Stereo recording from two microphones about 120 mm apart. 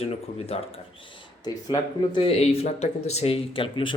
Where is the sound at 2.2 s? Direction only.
55° left (ahead or behind).